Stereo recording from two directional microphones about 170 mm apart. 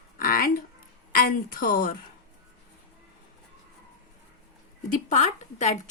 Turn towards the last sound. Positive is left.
turn(degrees=40)  # may be behind; listen again after turning